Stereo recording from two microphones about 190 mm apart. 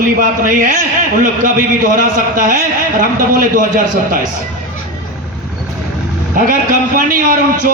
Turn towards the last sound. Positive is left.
turn(degrees=-45)  # may be behind; listen again after turning